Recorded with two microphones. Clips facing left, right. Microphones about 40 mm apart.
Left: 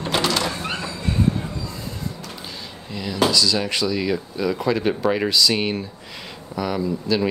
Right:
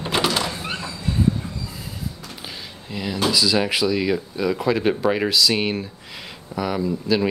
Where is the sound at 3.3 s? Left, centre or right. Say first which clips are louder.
Right 1 dB; centre.